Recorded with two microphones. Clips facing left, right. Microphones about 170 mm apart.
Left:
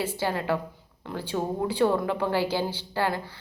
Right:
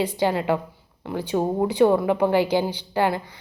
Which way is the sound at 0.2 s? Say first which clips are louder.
Right 5 dB; 15° right (ahead or behind).